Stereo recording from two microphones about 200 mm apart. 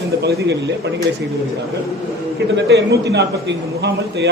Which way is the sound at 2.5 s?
55° right (ahead or behind).